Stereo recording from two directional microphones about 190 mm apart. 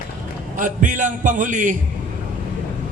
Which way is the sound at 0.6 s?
45° right (ahead or behind).